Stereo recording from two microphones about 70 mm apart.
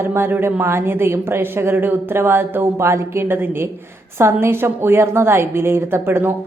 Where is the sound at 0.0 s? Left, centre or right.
Right.